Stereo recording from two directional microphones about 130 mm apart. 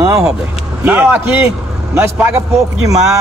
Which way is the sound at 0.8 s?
10° right (ahead or behind).